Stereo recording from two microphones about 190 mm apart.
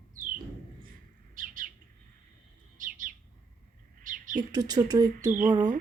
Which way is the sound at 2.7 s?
45° right (ahead or behind).